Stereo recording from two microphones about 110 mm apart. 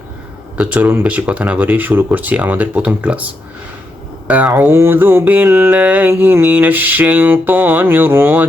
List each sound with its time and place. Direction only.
0.5 s music: 15° right (ahead or behind)
4.3 s music: 15° right (ahead or behind)